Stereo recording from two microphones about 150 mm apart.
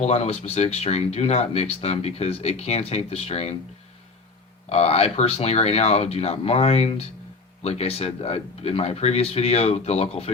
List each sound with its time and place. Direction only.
0.0 s speech: 45° left (ahead or behind)
4.7 s speech: 45° left (ahead or behind)